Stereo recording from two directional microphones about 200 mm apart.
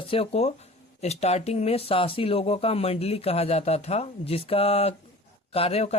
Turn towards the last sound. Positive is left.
turn(degrees=30)  # may be behind; listen again after turning